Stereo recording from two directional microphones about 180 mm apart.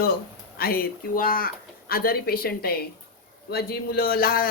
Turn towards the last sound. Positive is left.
turn(degrees=55)  # may be behind; listen again after turning